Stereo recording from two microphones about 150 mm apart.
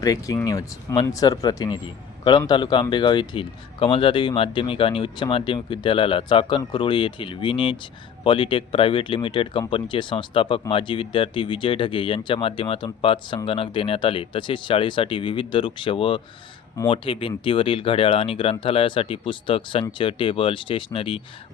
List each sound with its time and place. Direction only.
0.0 s speech: 25° left (ahead or behind)